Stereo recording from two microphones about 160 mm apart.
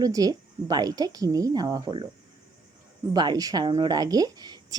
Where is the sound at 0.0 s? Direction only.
25° right (ahead or behind).